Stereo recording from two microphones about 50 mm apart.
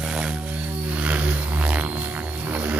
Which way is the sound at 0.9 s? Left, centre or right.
Right.